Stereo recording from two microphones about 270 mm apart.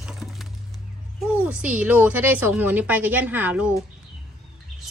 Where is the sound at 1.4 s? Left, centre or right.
Centre.